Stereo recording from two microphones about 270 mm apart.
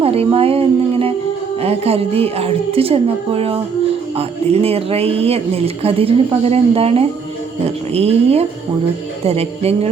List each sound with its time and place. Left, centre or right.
0.0 s speech: right